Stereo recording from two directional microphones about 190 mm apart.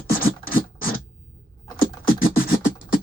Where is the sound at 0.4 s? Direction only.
50° left (ahead or behind).